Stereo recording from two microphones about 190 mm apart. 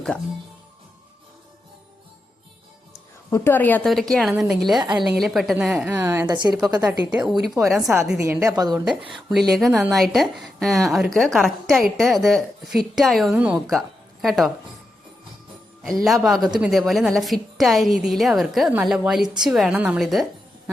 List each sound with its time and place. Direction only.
3.2 s a woman's voice: 10° left (ahead or behind)
4.8 s a woman's voice: 25° right (ahead or behind)
5.0 s a woman's voice: centre (ahead or behind); by 7.3 s 20° right (ahead or behind)
7.7 s a woman's voice: centre (ahead or behind)
8.2 s a woman's voice: 15° right (ahead or behind)
8.7 s a woman's voice: centre (ahead or behind)
15.8 s a woman's voice: centre (ahead or behind)